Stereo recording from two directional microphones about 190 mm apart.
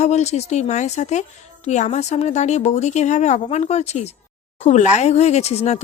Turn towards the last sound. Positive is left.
turn(degrees=35)  # may be behind; listen again after turning